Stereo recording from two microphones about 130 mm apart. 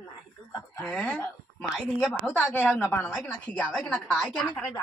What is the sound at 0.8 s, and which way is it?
Speech, 10° left (ahead or behind).